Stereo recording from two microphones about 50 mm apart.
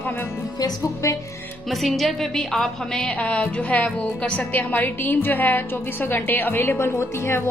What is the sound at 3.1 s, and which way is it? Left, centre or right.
A woman's voice, left.